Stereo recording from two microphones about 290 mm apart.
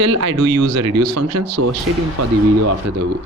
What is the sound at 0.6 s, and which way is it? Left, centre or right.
Speech, right.